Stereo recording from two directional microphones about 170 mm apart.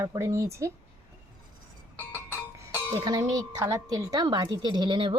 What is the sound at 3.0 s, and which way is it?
A woman's voice, 20° right (ahead or behind).